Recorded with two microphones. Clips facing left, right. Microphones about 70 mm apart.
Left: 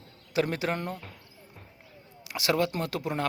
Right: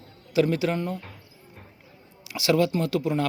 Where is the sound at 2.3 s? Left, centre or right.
Left.